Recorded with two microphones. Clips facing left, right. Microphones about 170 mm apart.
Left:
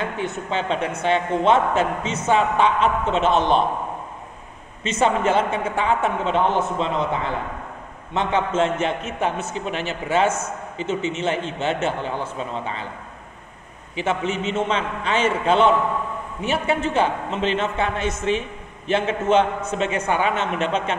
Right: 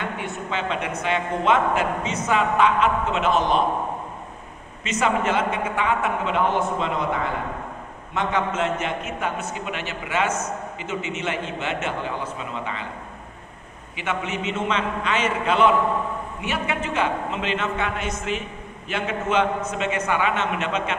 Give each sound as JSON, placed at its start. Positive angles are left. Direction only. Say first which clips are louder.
{"t": 0.2, "sound": "a man's voice", "louder": "left 3 dB", "side_deg": 35}
{"t": 4.8, "sound": "a man's voice", "louder": "left 3 dB", "side_deg": 30}
{"t": 8.1, "sound": "a man's voice", "louder": "left 2 dB", "side_deg": 30}
{"t": 13.9, "sound": "a man's voice", "louder": "left 4 dB", "side_deg": 30}